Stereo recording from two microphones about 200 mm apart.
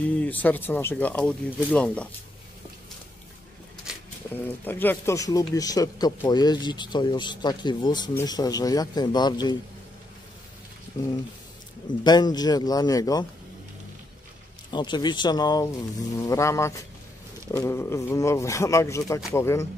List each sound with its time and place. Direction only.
0.0 s speech: 10° left (ahead or behind)
3.9 s bird: 5° right (ahead or behind)
4.6 s speech: 10° left (ahead or behind)
10.9 s speech: 20° left (ahead or behind)
14.7 s speech: 20° left (ahead or behind)